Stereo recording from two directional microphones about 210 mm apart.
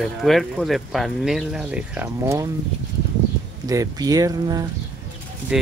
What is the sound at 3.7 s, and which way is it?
Speech, 15° right (ahead or behind).